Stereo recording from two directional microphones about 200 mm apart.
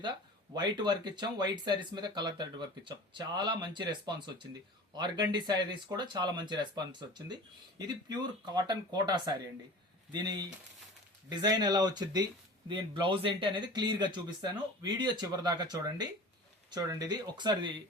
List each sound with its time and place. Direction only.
0.5 s speech: 20° right (ahead or behind)
7.9 s speech: 20° right (ahead or behind)
17.3 s speech: 20° right (ahead or behind)